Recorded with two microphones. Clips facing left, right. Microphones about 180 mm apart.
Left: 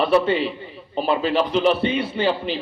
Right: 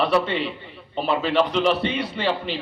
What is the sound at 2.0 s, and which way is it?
Speech, 30° left (ahead or behind).